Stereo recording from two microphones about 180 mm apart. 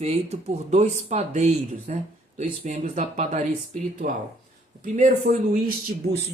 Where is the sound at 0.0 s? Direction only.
35° right (ahead or behind).